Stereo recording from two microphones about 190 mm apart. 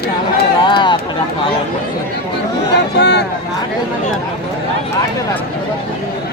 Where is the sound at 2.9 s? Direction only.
65° left (ahead or behind).